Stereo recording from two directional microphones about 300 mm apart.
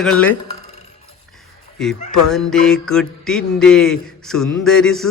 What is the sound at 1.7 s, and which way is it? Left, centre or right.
Speech, centre.